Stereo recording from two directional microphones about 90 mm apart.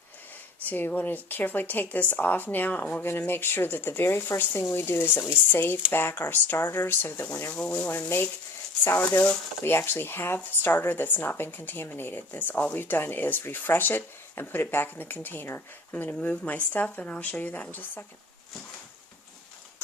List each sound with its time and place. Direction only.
0.6 s speech: 20° left (ahead or behind)
9.6 s speech: 25° left (ahead or behind)